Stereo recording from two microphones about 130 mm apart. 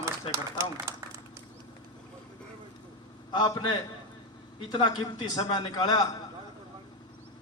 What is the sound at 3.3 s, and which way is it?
A man's voice, 35° left (ahead or behind).